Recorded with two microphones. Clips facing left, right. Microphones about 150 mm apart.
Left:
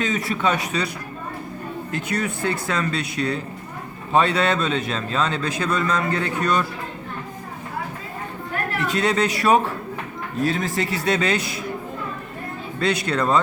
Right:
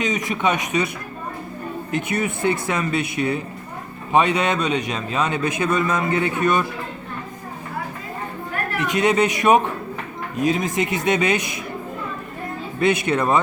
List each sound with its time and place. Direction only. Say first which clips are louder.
0.0 s a man's voice: right 1 dB; 15° right (ahead or behind)
1.9 s a man's voice: right 3 dB; 20° right (ahead or behind)
8.9 s a man's voice: right 3 dB; 20° right (ahead or behind)
12.8 s a man's voice: right 3 dB; 20° right (ahead or behind)